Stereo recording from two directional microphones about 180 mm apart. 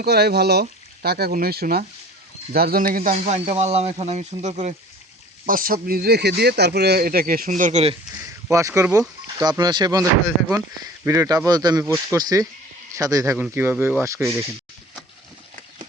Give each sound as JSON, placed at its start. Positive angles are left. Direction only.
{"t": 0.0, "sound": "speech", "side_deg": -60}
{"t": 3.2, "sound": "speech", "side_deg": -40}
{"t": 5.5, "sound": "speech", "side_deg": -50}
{"t": 8.4, "sound": "speech", "side_deg": -15}